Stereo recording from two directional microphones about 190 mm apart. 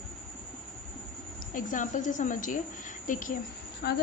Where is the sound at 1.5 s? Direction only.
45° left (ahead or behind).